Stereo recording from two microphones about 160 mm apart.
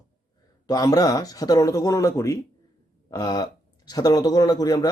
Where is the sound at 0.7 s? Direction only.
25° left (ahead or behind).